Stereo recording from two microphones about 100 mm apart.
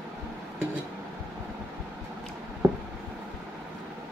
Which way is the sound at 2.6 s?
20° right (ahead or behind).